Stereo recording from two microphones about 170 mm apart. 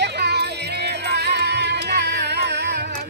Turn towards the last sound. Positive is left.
turn(degrees=-80)